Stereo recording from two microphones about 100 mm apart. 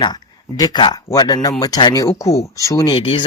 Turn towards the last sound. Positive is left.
turn(degrees=60)  # may be behind; listen again after turning